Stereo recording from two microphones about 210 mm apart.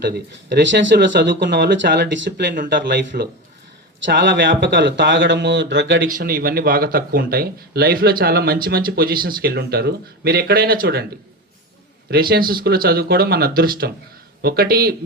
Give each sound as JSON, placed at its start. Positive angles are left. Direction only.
{"t": 0.0, "sound": "speech", "side_deg": -55}
{"t": 6.1, "sound": "speech", "side_deg": -40}
{"t": 12.1, "sound": "speech", "side_deg": -45}